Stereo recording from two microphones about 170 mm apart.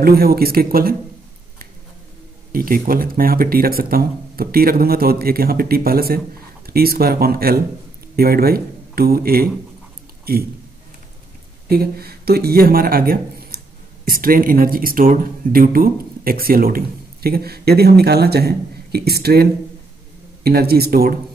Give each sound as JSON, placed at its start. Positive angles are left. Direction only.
{"t": 0.0, "sound": "speech", "side_deg": -65}
{"t": 2.5, "sound": "speech", "side_deg": -60}
{"t": 11.7, "sound": "speech", "side_deg": -65}